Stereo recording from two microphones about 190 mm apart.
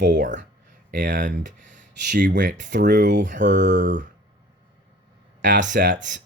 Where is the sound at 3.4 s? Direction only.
70° right (ahead or behind).